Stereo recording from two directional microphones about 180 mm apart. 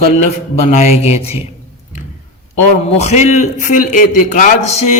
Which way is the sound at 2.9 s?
35° left (ahead or behind).